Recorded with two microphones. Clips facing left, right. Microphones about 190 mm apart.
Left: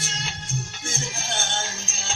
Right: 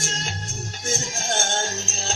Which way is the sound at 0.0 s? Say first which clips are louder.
Right 4 dB; 45° right (ahead or behind).